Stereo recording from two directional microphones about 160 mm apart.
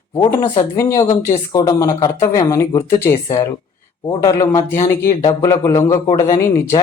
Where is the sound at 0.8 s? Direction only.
20° left (ahead or behind).